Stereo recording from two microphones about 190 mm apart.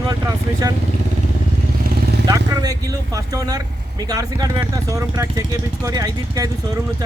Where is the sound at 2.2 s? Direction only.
20° right (ahead or behind).